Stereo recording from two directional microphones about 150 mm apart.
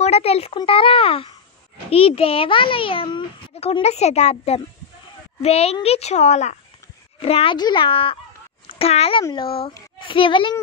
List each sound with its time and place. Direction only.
0.0 s a child's voice: 45° left (ahead or behind)